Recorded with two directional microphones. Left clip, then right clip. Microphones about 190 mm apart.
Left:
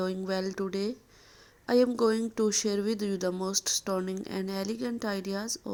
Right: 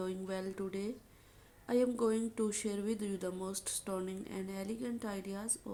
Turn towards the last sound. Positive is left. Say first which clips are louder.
# left 9 dB
turn(degrees=40)  # may be behind; listen again after turning